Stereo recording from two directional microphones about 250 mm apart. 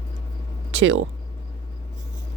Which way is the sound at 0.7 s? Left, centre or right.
Right.